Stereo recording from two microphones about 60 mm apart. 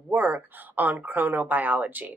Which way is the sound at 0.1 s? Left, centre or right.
Right.